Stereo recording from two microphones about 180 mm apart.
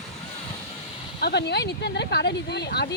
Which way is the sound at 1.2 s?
65° left (ahead or behind).